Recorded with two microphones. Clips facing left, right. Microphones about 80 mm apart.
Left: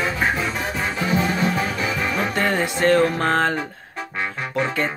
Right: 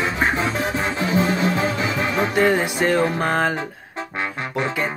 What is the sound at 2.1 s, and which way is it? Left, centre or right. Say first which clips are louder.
Music: right 5 dB; centre.